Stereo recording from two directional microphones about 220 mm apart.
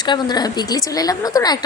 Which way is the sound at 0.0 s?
20° left (ahead or behind).